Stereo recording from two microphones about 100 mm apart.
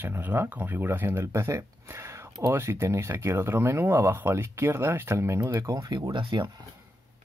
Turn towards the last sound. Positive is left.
turn(degrees=-50)  # may be behind; listen again after turning